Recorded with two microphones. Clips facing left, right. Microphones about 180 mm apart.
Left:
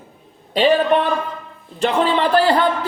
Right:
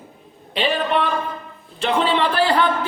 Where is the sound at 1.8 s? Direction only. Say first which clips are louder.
Left 2 dB; 45° left (ahead or behind).